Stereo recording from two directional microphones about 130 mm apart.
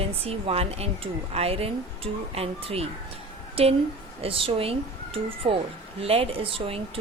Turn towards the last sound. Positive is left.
turn(degrees=-45)  # may be behind; listen again after turning